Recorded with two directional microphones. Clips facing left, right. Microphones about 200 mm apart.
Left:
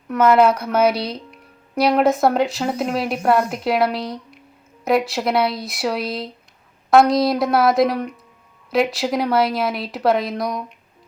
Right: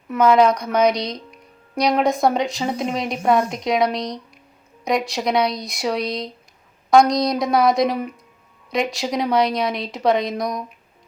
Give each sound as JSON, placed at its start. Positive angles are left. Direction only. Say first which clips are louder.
{"t": 0.1, "sound": "speech", "louder": "left 1 dB", "side_deg": 5}